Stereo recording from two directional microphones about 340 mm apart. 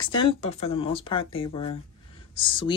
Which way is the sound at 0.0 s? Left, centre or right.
Centre.